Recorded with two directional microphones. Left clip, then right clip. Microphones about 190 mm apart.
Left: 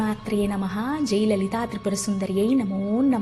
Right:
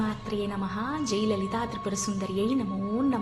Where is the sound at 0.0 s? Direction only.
40° left (ahead or behind).